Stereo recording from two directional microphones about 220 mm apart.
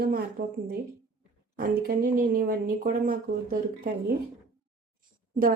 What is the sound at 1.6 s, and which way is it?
Speech, 40° right (ahead or behind).